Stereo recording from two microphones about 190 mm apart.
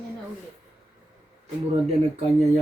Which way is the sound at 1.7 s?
35° right (ahead or behind).